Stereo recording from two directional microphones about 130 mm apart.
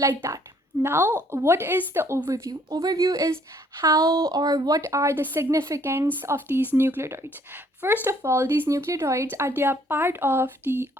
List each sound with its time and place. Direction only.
0.0 s speech: 20° right (ahead or behind)